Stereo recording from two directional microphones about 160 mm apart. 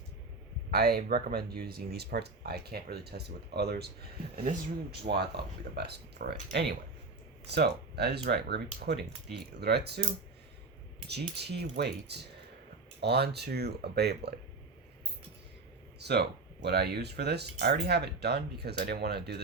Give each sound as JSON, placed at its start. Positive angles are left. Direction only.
{"t": 0.7, "sound": "speech", "side_deg": -75}
{"t": 5.1, "sound": "speech", "side_deg": -60}
{"t": 5.7, "sound": "speech", "side_deg": -90}
{"t": 11.1, "sound": "speech", "side_deg": -90}
{"t": 16.0, "sound": "speech", "side_deg": -90}